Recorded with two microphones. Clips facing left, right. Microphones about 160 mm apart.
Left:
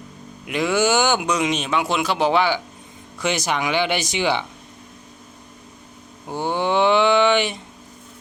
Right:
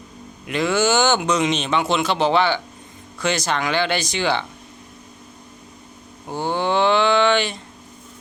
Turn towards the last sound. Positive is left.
turn(degrees=15)  # may be behind; listen again after turning